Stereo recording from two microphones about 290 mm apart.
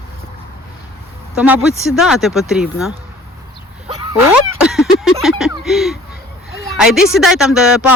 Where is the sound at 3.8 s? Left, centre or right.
Centre.